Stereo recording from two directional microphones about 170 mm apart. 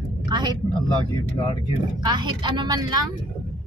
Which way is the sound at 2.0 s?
25° right (ahead or behind).